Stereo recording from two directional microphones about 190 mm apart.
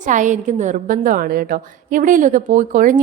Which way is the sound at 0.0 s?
40° right (ahead or behind).